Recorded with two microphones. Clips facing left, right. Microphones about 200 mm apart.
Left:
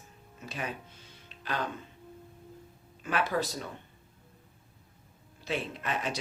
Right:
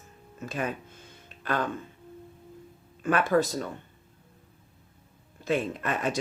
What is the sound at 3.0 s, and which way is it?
Speech, 50° right (ahead or behind).